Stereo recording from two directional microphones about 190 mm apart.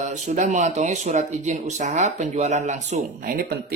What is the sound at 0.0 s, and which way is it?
Speech, 35° right (ahead or behind).